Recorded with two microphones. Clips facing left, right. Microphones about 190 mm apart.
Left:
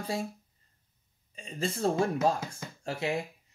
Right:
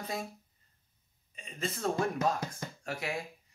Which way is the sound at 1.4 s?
30° left (ahead or behind).